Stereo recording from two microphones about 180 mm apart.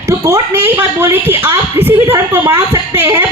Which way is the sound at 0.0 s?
15° right (ahead or behind).